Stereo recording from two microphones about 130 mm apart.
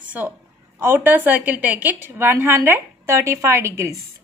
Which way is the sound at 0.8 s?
15° right (ahead or behind).